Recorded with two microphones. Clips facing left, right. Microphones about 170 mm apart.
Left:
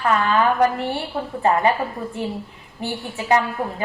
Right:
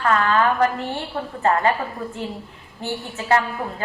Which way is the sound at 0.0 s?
15° left (ahead or behind).